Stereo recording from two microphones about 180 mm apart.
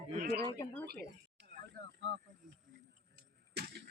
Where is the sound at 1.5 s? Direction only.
60° right (ahead or behind); by 2.1 s 75° right (ahead or behind).